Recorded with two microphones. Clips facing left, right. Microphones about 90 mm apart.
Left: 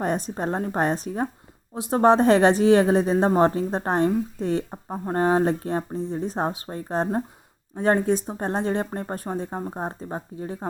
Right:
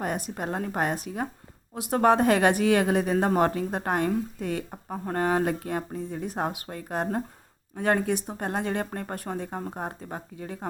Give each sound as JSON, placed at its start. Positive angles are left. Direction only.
{"t": 0.0, "sound": "a woman's voice", "side_deg": 35}